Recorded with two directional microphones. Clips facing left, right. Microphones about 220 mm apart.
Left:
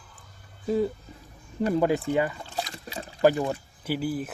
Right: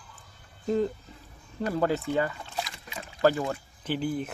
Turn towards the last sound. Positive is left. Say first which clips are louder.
# left 1 dB
turn(degrees=5)  # may be behind; listen again after turning